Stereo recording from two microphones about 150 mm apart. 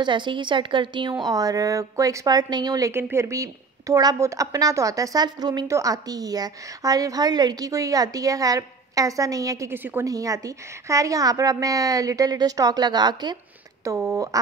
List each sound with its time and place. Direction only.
0.0 s a woman's voice: 30° right (ahead or behind)